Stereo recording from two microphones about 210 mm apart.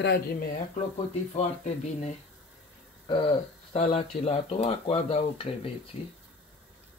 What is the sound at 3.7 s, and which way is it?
Speech, 30° left (ahead or behind).